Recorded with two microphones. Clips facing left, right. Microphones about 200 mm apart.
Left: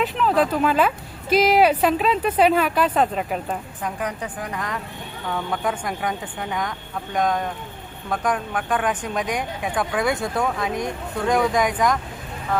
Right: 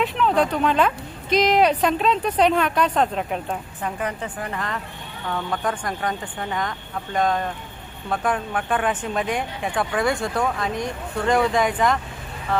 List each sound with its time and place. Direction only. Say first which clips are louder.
0.0 s speech: even; centre (ahead or behind)